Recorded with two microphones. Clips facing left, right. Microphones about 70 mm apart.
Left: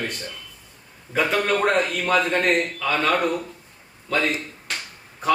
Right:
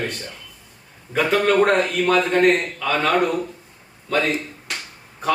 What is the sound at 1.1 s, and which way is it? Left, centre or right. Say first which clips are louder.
A man's voice: right 3 dB; centre.